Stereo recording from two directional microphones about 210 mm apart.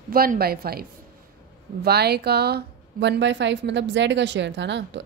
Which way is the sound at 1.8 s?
50° right (ahead or behind).